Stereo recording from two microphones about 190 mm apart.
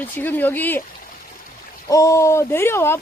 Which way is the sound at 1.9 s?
15° left (ahead or behind).